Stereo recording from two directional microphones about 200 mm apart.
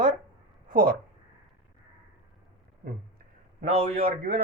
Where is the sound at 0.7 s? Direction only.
45° right (ahead or behind).